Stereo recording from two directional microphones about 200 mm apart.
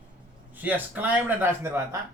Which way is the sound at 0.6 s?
10° right (ahead or behind).